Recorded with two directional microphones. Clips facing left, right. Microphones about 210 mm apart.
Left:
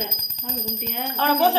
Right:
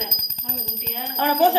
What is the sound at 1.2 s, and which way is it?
Speech, 15° right (ahead or behind).